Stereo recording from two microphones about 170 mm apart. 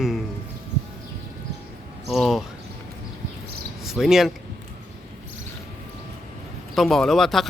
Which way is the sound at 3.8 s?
5° right (ahead or behind).